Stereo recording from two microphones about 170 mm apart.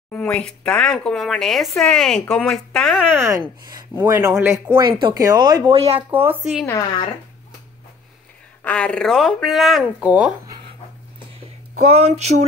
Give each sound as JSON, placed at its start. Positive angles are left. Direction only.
{"t": 0.1, "sound": "speech", "side_deg": 10}
{"t": 3.1, "sound": "speech", "side_deg": -15}
{"t": 4.7, "sound": "speech", "side_deg": -30}
{"t": 6.0, "sound": "speech", "side_deg": -10}
{"t": 8.6, "sound": "speech", "side_deg": 5}
{"t": 11.3, "sound": "a sound", "side_deg": -40}